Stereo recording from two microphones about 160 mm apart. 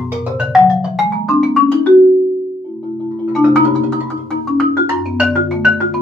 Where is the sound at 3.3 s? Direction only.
5° left (ahead or behind).